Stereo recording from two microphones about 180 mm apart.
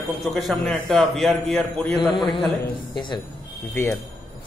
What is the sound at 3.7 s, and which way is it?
Speech, 15° left (ahead or behind).